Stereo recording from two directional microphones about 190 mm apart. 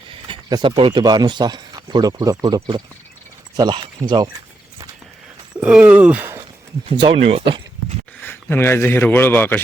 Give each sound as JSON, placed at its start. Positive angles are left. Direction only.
{"t": 0.3, "sound": "a sound", "side_deg": -25}
{"t": 0.8, "sound": "speech", "side_deg": -25}
{"t": 5.5, "sound": "speech", "side_deg": -5}
{"t": 6.8, "sound": "speech", "side_deg": -25}
{"t": 8.2, "sound": "a man's voice", "side_deg": 10}